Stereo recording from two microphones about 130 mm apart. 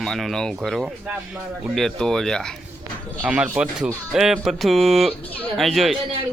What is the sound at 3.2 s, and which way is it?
Speech, 5° right (ahead or behind).